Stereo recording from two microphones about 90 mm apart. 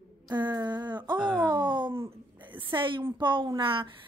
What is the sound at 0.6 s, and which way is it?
Speech, 55° right (ahead or behind).